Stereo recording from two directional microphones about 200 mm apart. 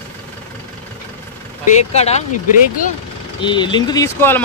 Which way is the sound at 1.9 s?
30° left (ahead or behind).